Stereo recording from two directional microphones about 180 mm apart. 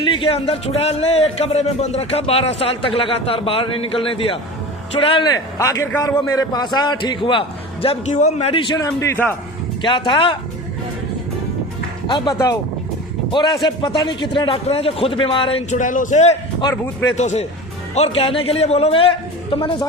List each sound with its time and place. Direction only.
0.0 s a man's voice: 30° left (ahead or behind)
8.8 s a man's voice: 15° left (ahead or behind)
9.8 s a man's voice: 25° left (ahead or behind)
12.0 s a man's voice: 25° left (ahead or behind)
15.7 s a man's voice: 45° left (ahead or behind); by 19.9 s 25° left (ahead or behind)